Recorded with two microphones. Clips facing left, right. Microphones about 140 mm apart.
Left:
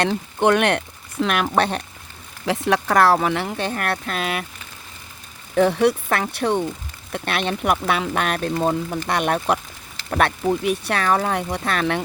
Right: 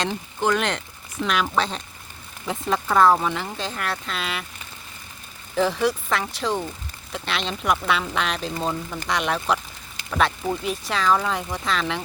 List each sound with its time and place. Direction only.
0.0 s speech: 60° left (ahead or behind)
2.5 s speech: 75° left (ahead or behind); by 4.4 s 55° left (ahead or behind)
5.5 s speech: 60° left (ahead or behind)